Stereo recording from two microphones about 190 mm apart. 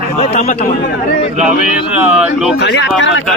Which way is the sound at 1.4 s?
5° right (ahead or behind).